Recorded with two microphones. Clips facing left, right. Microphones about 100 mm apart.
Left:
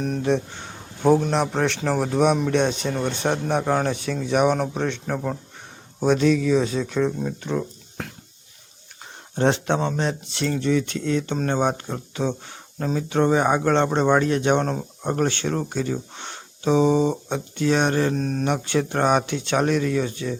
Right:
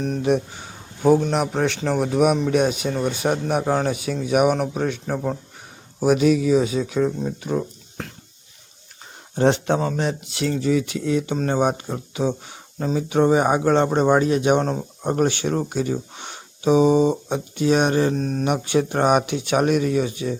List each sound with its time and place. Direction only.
0.2 s speech: 15° right (ahead or behind)
1.0 s speech: centre (ahead or behind)
7.6 s a sound: centre (ahead or behind)
9.3 s speech: 5° right (ahead or behind)
18.1 s speech: 5° right (ahead or behind)
18.4 s speech: 15° right (ahead or behind)